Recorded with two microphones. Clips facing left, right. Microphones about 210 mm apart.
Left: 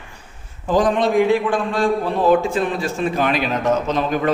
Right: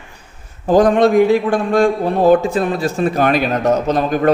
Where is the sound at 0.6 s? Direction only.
50° right (ahead or behind).